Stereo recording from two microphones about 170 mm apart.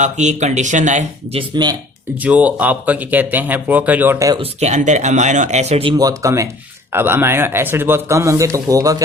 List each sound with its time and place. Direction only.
0.0 s speech: 45° right (ahead or behind); by 1.7 s 30° right (ahead or behind)
2.1 s speech: 10° right (ahead or behind)
4.4 s speech: 45° right (ahead or behind)
6.0 s speech: 20° right (ahead or behind)